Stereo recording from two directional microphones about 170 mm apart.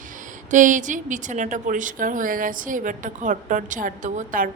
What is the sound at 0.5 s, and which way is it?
A woman's voice, 50° right (ahead or behind).